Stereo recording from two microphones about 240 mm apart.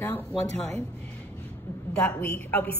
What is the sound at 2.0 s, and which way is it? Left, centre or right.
Speech, centre.